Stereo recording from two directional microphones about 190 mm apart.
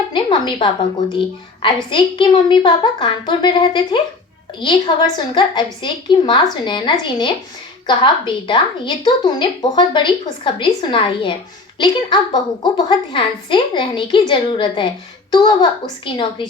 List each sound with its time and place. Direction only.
0.1 s a woman's voice: 25° left (ahead or behind)